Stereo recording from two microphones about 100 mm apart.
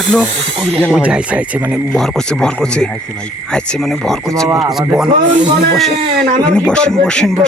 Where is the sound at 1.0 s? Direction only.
10° right (ahead or behind).